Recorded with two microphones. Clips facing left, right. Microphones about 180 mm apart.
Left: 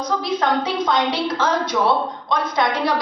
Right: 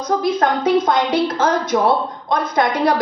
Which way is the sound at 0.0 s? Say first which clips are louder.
Right 4 dB; 50° right (ahead or behind).